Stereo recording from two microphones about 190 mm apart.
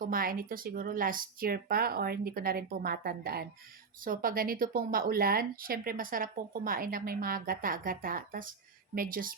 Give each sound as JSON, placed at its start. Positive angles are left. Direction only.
{"t": 0.0, "sound": "speech", "side_deg": -50}